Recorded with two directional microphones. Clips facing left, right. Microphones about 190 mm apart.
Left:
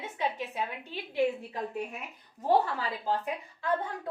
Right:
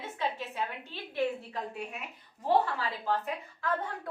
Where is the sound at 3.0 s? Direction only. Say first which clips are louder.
Even; 15° left (ahead or behind).